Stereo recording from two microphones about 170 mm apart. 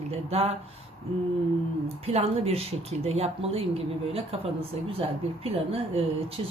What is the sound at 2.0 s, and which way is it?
Speech, 35° right (ahead or behind).